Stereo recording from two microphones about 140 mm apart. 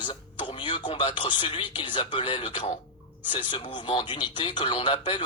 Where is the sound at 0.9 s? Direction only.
35° left (ahead or behind).